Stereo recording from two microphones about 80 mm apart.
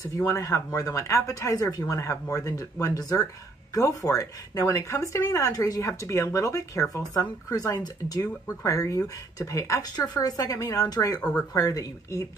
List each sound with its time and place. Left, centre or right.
0.3 s speech: left
8.6 s speech: left
9.8 s speech: left
11.1 s speech: centre
11.5 s speech: left